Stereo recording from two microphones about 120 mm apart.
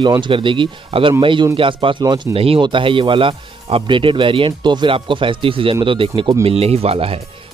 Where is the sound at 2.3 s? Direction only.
55° right (ahead or behind).